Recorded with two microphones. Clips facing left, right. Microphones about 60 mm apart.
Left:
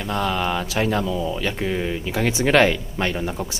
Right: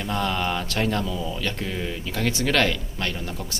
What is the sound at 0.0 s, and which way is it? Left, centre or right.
Speech, centre.